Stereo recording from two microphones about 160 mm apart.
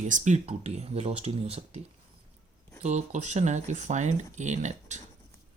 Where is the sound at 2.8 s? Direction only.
45° right (ahead or behind).